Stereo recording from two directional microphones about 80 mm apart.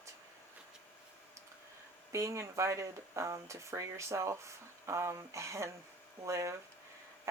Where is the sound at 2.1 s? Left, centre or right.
Right.